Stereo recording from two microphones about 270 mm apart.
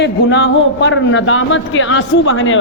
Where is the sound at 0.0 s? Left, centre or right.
Left.